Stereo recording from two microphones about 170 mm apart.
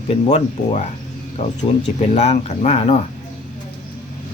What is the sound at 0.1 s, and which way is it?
Speech, 40° left (ahead or behind).